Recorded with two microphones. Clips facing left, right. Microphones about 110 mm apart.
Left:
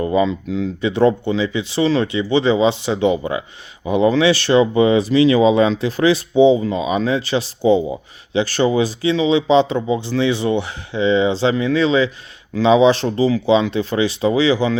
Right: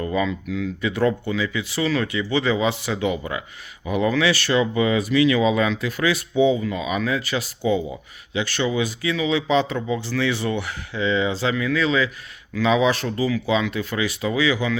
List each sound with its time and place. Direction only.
0.0 s speech: 25° left (ahead or behind)